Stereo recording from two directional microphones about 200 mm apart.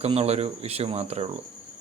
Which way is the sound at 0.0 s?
30° right (ahead or behind).